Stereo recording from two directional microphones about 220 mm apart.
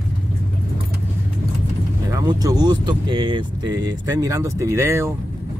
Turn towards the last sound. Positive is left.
turn(degrees=-10)  # may be behind; listen again after turning